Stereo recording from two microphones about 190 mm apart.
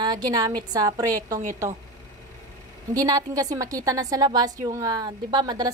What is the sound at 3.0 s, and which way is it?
A woman's voice, 20° right (ahead or behind).